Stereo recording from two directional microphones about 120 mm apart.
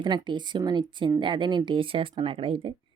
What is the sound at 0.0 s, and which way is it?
Speech, 40° right (ahead or behind).